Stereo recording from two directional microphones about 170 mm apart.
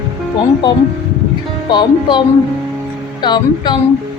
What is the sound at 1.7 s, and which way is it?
Speech, 25° left (ahead or behind).